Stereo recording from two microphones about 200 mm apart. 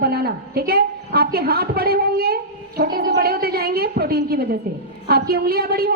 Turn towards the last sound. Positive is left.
turn(degrees=-50)  # may be behind; listen again after turning